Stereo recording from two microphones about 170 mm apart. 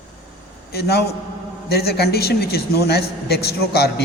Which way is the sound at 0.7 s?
70° left (ahead or behind).